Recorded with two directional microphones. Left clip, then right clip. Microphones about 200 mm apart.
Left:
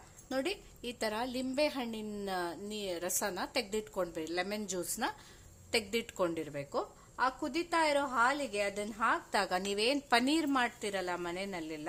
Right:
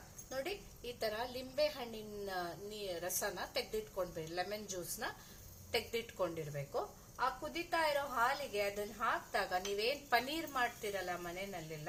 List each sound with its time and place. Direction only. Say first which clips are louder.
0.3 s a woman's voice: left 6 dB; 60° left (ahead or behind)